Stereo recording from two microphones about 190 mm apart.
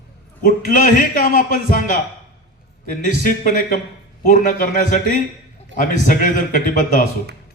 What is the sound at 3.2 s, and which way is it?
A man's voice, 45° left (ahead or behind).